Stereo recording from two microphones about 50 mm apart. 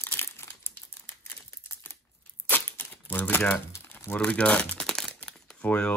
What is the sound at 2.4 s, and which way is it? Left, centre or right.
Tearing, left.